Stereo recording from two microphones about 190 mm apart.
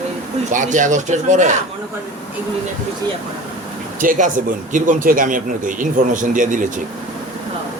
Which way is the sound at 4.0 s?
45° right (ahead or behind).